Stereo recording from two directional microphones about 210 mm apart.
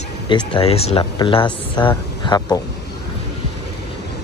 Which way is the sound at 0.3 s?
25° left (ahead or behind).